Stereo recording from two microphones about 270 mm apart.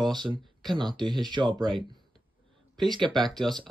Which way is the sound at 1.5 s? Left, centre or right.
Centre.